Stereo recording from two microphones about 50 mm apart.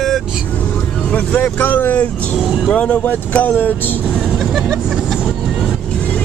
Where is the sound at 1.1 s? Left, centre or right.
Left.